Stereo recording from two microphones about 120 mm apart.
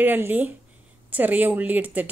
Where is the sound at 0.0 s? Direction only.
15° right (ahead or behind).